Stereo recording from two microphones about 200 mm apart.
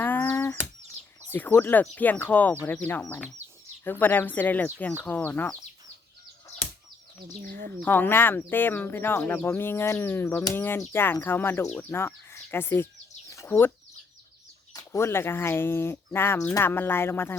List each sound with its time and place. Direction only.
0.0 s a sound: 10° left (ahead or behind)
1.3 s speech: 10° left (ahead or behind)
6.5 s a sound: 35° left (ahead or behind)
7.4 s speech: 50° right (ahead or behind)
7.7 s speech: 10° left (ahead or behind)
13.3 s chicken: 15° left (ahead or behind)
14.7 s speech: 15° left (ahead or behind)